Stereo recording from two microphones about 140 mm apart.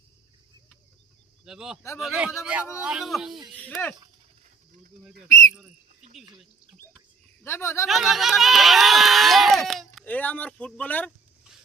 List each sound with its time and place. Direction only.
1.5 s speech: 5° right (ahead or behind)
5.3 s speech: 20° left (ahead or behind)
7.4 s speech: 20° left (ahead or behind)
7.9 s speech: centre (ahead or behind)
10.1 s speech: 10° left (ahead or behind)